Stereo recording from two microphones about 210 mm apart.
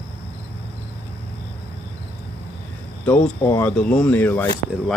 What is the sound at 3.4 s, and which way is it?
Speech, 10° left (ahead or behind).